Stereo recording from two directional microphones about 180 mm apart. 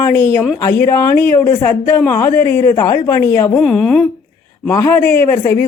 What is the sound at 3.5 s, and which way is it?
Speech, 5° left (ahead or behind).